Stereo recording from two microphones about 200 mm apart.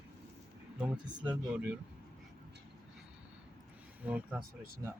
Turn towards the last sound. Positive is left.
turn(degrees=-10)  # may be behind; listen again after turning